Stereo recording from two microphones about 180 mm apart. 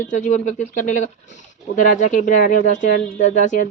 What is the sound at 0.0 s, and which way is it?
A woman's voice, 45° left (ahead or behind).